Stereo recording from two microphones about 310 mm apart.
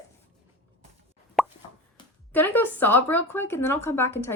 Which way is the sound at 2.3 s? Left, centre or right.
Centre.